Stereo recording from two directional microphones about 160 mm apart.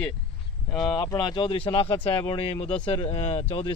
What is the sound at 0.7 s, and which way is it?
Speech, 5° left (ahead or behind).